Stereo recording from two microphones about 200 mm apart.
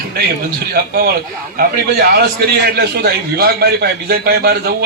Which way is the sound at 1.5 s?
55° right (ahead or behind).